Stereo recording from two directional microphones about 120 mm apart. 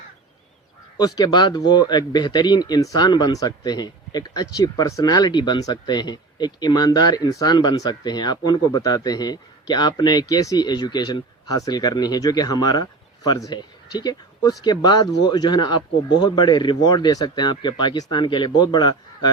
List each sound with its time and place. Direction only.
0.9 s speech: 35° left (ahead or behind)